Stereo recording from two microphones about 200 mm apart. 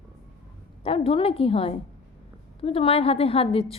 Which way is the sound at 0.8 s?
25° left (ahead or behind).